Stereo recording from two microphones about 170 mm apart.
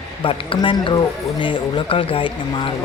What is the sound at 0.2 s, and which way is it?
Speech, 30° left (ahead or behind).